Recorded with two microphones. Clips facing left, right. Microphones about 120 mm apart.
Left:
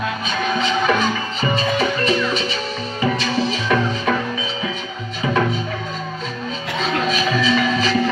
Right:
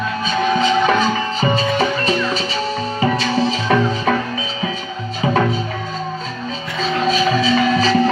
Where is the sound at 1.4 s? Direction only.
35° right (ahead or behind).